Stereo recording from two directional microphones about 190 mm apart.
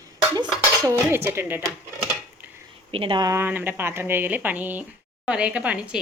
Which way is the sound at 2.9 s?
25° right (ahead or behind).